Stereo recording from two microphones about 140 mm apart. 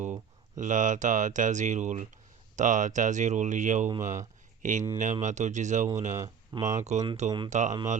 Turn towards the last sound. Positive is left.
turn(degrees=-60)  # may be behind; listen again after turning